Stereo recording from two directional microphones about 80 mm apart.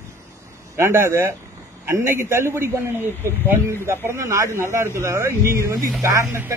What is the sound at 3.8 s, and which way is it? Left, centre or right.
Speech, right.